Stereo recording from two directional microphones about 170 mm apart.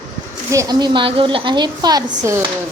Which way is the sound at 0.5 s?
20° right (ahead or behind).